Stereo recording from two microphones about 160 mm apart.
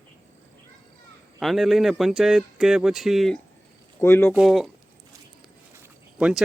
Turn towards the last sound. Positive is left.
turn(degrees=-10)  # may be behind; listen again after turning